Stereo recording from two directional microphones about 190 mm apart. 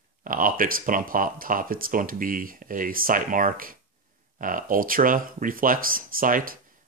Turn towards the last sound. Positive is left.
turn(degrees=-45)  # may be behind; listen again after turning